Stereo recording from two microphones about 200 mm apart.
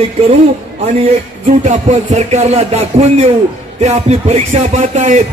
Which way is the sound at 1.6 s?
35° right (ahead or behind).